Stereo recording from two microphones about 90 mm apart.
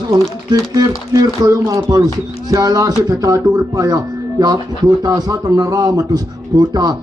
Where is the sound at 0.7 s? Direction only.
45° right (ahead or behind).